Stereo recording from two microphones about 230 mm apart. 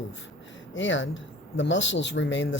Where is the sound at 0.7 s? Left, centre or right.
Left.